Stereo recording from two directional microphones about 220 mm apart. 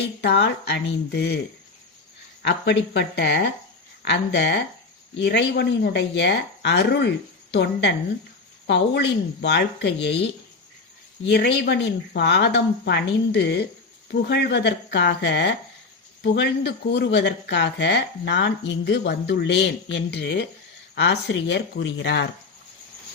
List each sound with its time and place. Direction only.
0.2 s speech: 50° left (ahead or behind)
2.4 s speech: 50° left (ahead or behind)
11.3 s speech: 45° left (ahead or behind)